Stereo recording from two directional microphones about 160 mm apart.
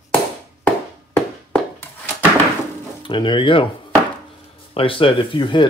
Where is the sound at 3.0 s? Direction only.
30° left (ahead or behind).